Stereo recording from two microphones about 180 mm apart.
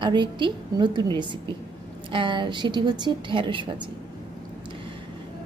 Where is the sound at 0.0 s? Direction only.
25° right (ahead or behind).